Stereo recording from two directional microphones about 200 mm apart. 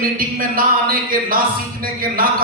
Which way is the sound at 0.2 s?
45° right (ahead or behind).